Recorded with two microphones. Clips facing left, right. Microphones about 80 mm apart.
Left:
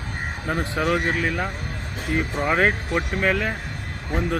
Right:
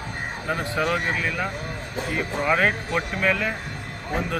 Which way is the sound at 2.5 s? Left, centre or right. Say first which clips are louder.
Left 1 dB; left.